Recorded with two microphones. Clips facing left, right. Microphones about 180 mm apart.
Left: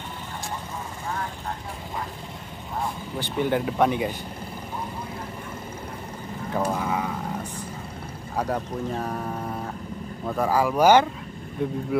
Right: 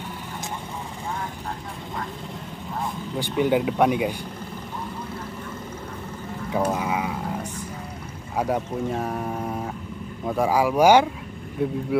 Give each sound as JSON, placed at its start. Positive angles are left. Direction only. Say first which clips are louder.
{"t": 3.2, "sound": "speech", "louder": "right 3 dB", "side_deg": -10}
{"t": 6.5, "sound": "a sound", "louder": "right 2 dB", "side_deg": -5}
{"t": 8.4, "sound": "speech", "louder": "right 3 dB", "side_deg": -10}